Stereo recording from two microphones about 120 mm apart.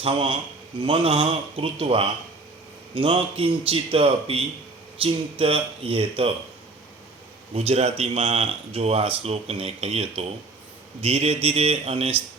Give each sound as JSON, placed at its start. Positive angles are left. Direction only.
{"t": 0.0, "sound": "a man's voice", "side_deg": -50}
{"t": 7.5, "sound": "speech", "side_deg": -55}